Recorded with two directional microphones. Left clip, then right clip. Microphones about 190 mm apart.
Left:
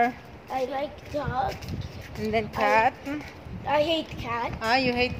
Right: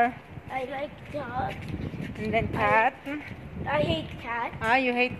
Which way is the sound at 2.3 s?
10° right (ahead or behind).